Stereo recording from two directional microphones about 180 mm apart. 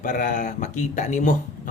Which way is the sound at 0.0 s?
45° left (ahead or behind).